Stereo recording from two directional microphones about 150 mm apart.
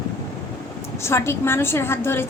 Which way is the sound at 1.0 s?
15° left (ahead or behind).